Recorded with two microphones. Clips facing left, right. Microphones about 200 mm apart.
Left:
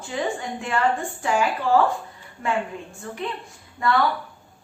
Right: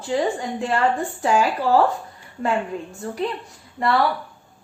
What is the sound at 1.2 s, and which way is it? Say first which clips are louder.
Speech: right 3 dB; 35° right (ahead or behind).